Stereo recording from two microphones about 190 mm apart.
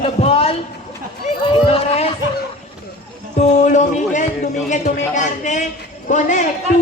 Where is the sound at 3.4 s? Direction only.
40° left (ahead or behind).